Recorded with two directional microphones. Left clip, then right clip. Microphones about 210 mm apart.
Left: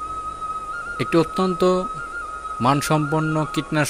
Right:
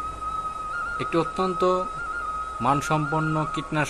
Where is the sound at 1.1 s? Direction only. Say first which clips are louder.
Left 5 dB; 40° left (ahead or behind).